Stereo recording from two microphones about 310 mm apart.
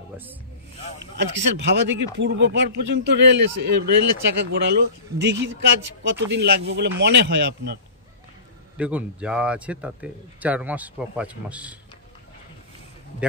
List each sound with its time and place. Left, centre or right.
1.1 s speech: right
8.7 s speech: centre